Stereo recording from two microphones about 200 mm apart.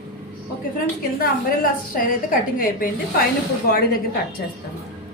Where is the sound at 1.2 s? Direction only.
45° left (ahead or behind).